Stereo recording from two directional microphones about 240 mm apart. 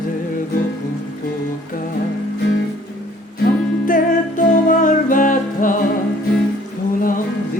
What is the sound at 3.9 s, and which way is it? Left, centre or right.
Music, left.